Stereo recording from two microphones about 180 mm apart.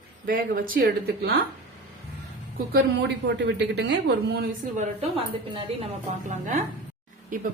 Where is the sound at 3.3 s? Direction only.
75° right (ahead or behind).